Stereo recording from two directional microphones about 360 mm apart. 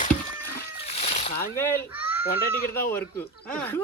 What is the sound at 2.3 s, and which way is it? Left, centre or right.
Speech, left.